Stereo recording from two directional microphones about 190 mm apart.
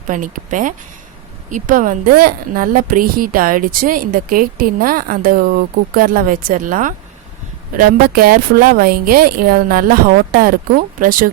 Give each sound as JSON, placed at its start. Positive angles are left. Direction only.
{"t": 0.1, "sound": "a woman's voice", "side_deg": -45}